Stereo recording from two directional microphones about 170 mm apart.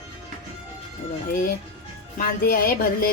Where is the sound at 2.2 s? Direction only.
60° left (ahead or behind).